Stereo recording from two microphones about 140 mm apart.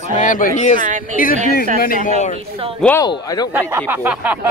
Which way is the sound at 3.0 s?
25° left (ahead or behind).